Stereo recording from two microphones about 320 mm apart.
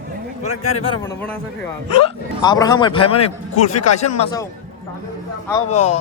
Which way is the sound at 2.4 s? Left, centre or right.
Centre.